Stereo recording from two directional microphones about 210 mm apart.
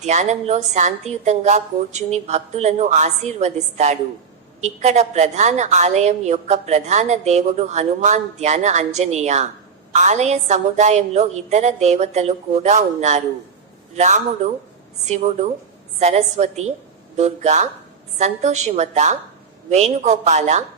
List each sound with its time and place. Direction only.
0.0 s a woman's voice: 35° right (ahead or behind)